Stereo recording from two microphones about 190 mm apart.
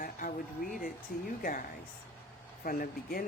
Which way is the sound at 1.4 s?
45° left (ahead or behind).